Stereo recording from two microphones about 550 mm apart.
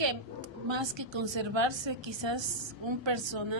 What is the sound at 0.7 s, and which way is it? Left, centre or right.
A woman's voice, right.